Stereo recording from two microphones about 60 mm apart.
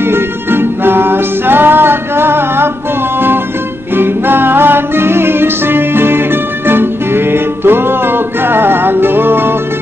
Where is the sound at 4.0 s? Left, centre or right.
Right.